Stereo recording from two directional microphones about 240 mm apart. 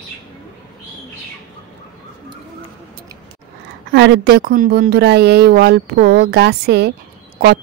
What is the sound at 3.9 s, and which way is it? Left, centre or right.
A woman's voice, right.